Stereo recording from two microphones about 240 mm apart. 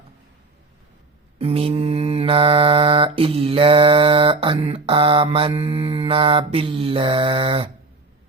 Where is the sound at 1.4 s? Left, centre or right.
Right.